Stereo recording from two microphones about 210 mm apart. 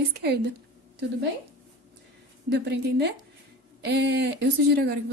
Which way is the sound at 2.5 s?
55° right (ahead or behind).